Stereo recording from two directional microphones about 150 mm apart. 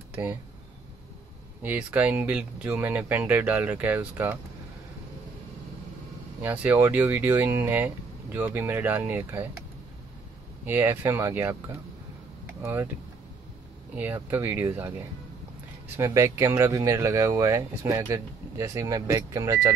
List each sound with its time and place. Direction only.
0.1 s speech: 10° right (ahead or behind)
1.6 s speech: 10° right (ahead or behind)
6.4 s speech: 10° right (ahead or behind)
10.6 s speech: 15° right (ahead or behind)
13.9 s speech: 15° right (ahead or behind)
16.0 s speech: 20° right (ahead or behind)